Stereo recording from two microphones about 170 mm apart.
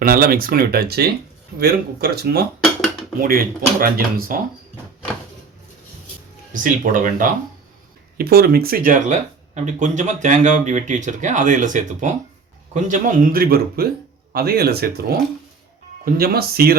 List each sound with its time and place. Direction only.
0.0 s speech: 60° right (ahead or behind)
6.5 s speech: 50° right (ahead or behind)
8.2 s speech: 65° right (ahead or behind)